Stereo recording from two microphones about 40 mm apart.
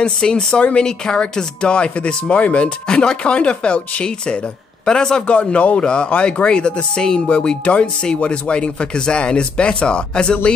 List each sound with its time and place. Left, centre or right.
0.0 s speech: centre